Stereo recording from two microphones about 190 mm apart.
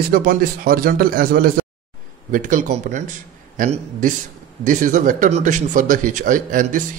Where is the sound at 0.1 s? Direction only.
45° right (ahead or behind).